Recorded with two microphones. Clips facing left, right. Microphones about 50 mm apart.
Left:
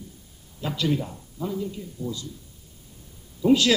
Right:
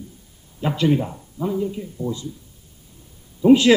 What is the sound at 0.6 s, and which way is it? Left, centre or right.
A man's voice, right.